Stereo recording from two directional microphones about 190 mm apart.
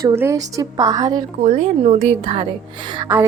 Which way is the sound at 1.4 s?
35° right (ahead or behind).